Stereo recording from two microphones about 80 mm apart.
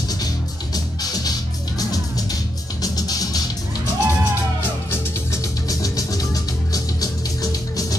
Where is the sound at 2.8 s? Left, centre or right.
Left.